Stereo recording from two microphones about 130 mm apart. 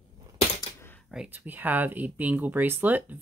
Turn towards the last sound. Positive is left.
turn(degrees=-15)  # may be behind; listen again after turning